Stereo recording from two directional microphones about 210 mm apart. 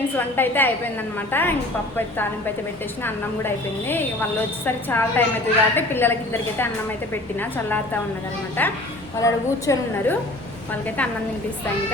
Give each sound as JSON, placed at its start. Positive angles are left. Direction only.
{"t": 0.2, "sound": "a woman's voice", "side_deg": 10}
{"t": 3.0, "sound": "a woman's voice", "side_deg": 10}